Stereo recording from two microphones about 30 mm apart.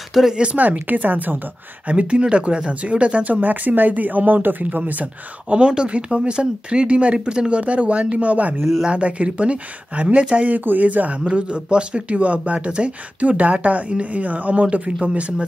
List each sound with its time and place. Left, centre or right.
0.3 s speech: right
0.6 s speech: right
2.0 s speech: right
3.3 s speech: right
5.5 s speech: right
8.8 s speech: right
10.5 s speech: right
11.1 s speech: right
13.2 s speech: right
14.2 s speech: right
14.9 s speech: right